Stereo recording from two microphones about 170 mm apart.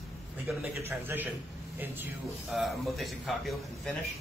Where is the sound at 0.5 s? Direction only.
10° right (ahead or behind).